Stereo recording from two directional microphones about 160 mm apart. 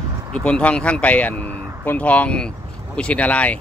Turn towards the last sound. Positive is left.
turn(degrees=10)  # may be behind; listen again after turning